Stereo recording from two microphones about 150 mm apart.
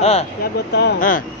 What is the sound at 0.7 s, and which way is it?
Speech, 80° left.